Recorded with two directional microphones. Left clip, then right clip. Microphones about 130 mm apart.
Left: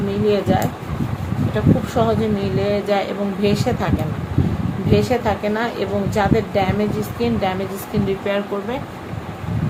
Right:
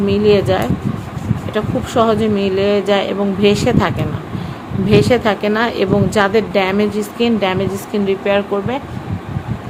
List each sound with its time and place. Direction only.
0.3 s speech: 90° right
1.5 s speech: 65° right (ahead or behind)
4.9 s speech: 90° right; by 7.5 s 75° right (ahead or behind)
8.0 s speech: 50° right (ahead or behind)